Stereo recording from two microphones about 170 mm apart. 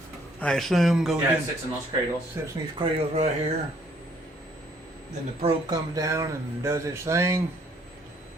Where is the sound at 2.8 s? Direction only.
35° right (ahead or behind).